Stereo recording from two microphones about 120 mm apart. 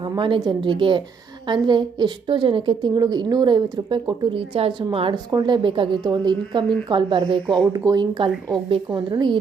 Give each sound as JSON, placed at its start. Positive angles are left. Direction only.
{"t": 0.0, "sound": "a woman's voice", "side_deg": -40}